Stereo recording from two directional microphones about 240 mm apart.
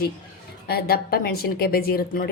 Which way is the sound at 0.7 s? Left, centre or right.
Left.